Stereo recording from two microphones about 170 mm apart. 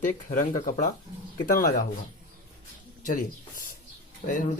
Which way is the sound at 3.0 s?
50° left (ahead or behind).